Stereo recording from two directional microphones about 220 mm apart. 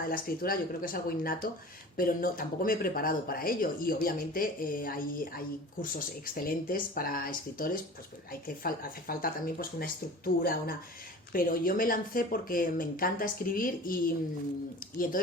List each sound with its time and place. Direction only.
0.0 s speech: 40° left (ahead or behind)